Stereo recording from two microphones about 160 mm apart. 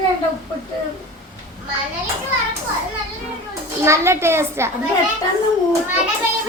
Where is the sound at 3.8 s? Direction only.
15° right (ahead or behind).